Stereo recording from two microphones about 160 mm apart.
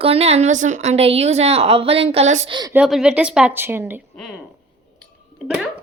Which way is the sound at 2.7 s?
5° right (ahead or behind).